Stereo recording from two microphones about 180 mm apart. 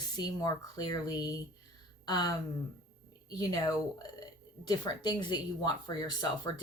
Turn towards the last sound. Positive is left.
turn(degrees=20)  # may be behind; listen again after turning